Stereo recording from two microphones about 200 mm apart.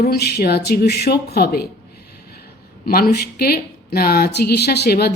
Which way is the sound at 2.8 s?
50° left (ahead or behind).